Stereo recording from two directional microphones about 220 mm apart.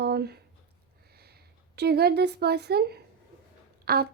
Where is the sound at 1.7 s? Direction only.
45° right (ahead or behind).